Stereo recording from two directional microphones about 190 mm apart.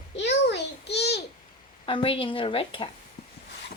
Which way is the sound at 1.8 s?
30° left (ahead or behind).